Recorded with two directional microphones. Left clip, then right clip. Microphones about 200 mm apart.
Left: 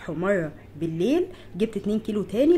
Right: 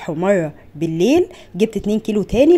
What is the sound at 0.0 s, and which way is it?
Speech, 35° right (ahead or behind).